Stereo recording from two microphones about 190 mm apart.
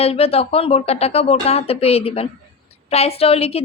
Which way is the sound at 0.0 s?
30° left (ahead or behind).